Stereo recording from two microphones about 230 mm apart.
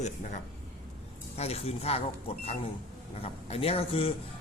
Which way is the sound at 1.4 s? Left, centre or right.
Left.